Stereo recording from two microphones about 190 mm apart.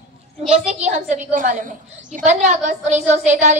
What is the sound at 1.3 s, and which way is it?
A woman's voice, 45° right (ahead or behind).